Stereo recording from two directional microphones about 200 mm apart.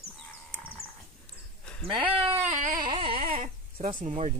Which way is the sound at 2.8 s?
25° right (ahead or behind).